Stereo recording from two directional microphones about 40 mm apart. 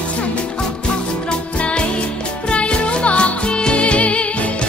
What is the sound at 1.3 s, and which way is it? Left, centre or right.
Music, left.